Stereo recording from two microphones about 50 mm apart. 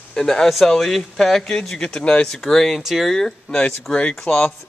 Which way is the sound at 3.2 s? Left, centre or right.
Centre.